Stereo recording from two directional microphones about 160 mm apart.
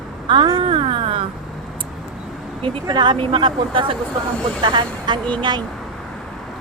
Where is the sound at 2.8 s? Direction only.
25° right (ahead or behind).